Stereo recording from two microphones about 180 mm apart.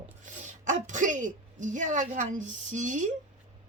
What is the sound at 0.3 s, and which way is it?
Speech, 45° right (ahead or behind).